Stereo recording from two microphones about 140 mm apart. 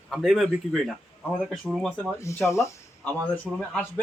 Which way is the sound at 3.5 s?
5° right (ahead or behind).